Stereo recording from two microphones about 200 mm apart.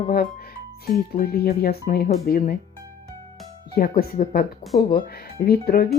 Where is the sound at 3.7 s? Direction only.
50° left (ahead or behind).